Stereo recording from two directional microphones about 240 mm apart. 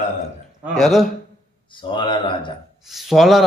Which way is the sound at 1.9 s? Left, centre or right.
Centre.